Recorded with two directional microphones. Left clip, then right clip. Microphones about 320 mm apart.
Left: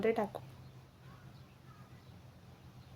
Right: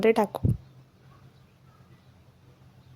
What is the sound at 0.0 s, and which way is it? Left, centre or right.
Speech, right.